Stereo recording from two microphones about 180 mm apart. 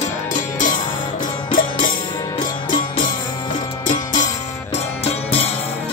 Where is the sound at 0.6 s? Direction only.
50° left (ahead or behind).